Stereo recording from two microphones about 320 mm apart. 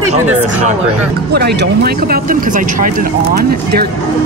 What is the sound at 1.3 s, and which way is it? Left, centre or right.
Speech, right.